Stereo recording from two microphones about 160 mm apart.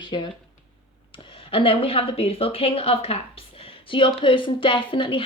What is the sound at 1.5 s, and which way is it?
A woman's voice, 35° left (ahead or behind).